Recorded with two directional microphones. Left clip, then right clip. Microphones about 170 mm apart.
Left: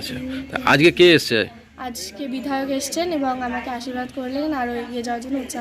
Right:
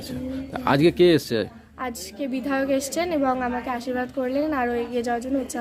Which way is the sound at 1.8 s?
30° right (ahead or behind).